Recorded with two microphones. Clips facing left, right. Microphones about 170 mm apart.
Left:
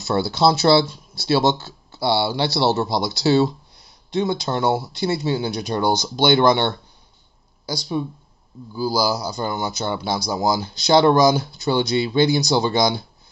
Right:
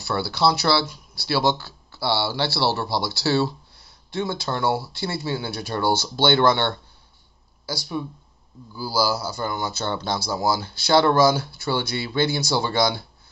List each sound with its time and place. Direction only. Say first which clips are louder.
0.0 s speech: left 4 dB; 20° left (ahead or behind)